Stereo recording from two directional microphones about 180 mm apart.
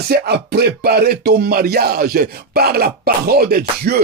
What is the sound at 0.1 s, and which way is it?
Speech, 65° right (ahead or behind).